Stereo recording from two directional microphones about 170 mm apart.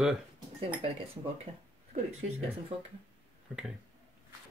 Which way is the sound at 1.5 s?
30° right (ahead or behind).